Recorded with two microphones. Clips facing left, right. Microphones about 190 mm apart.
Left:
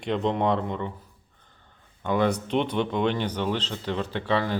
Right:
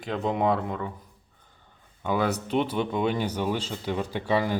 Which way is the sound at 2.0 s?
5° right (ahead or behind).